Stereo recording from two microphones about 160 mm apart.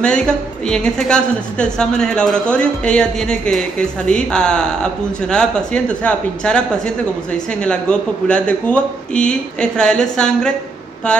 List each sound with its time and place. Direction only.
0.0 s a woman's voice: 5° left (ahead or behind)